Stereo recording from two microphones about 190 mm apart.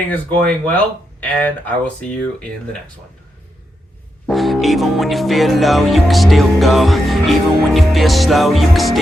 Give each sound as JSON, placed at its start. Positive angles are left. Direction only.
{"t": 0.1, "sound": "speech", "side_deg": 10}
{"t": 4.3, "sound": "music", "side_deg": 0}